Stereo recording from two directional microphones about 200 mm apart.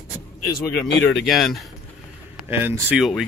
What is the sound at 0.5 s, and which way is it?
Speech, 65° left (ahead or behind).